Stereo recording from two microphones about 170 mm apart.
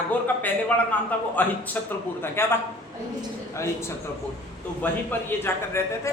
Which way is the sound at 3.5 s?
15° left (ahead or behind).